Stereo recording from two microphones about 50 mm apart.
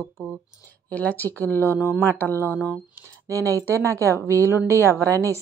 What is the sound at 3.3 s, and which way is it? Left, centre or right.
Speech, right.